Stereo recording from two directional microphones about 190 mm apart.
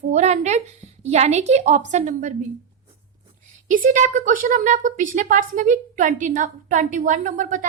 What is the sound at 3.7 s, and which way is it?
A woman's voice, 45° right (ahead or behind).